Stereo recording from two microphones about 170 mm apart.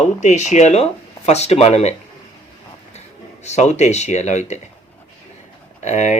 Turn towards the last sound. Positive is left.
turn(degrees=45)  # may be behind; listen again after turning